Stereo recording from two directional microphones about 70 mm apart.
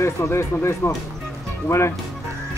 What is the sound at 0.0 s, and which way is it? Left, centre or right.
Speech, left.